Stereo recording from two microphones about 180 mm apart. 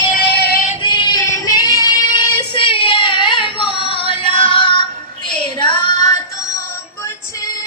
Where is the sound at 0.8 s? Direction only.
20° left (ahead or behind).